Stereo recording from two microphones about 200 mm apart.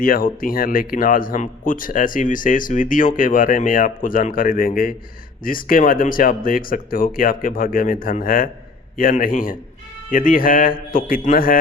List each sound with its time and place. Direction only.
0.0 s speech: 45° left (ahead or behind)